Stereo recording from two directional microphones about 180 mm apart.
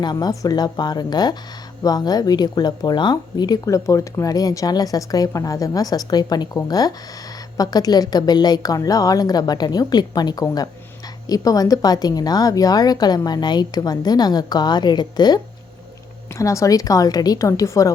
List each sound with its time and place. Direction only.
0.0 s speech: 20° left (ahead or behind)